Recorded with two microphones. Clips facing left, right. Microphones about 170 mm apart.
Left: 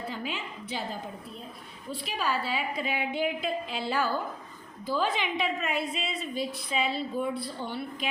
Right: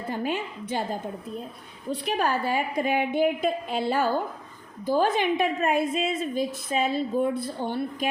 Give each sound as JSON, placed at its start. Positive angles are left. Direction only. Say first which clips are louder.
{"t": 0.1, "sound": "a woman's voice", "louder": "right 7 dB", "side_deg": -50}
{"t": 2.0, "sound": "a woman's voice", "louder": "right 5 dB", "side_deg": -60}